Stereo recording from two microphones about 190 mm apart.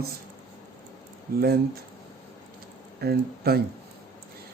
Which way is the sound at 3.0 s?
55° right (ahead or behind).